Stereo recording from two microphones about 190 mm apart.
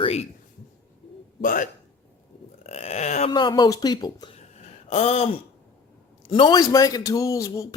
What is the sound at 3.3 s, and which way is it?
A man's voice, 25° left (ahead or behind).